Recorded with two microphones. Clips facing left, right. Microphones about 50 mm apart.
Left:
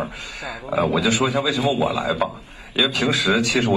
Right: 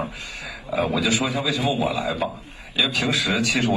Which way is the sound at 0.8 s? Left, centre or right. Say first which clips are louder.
Left 3 dB; left.